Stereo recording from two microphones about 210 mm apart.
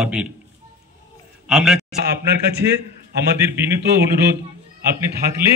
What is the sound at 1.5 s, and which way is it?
Speech, 5° right (ahead or behind).